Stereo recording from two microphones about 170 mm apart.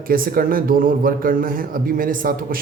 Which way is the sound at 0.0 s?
60° right (ahead or behind).